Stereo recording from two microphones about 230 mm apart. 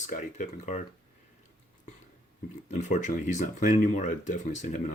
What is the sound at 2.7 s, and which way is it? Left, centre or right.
Speech, left.